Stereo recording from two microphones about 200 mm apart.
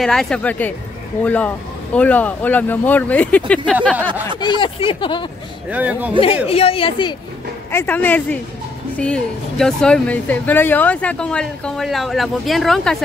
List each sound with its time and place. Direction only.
0.0 s speech: centre (ahead or behind)
4.4 s speech: 25° left (ahead or behind)
5.7 s speech: 5° right (ahead or behind)
6.2 s speech: 30° left (ahead or behind)
7.7 s speech: 10° left (ahead or behind)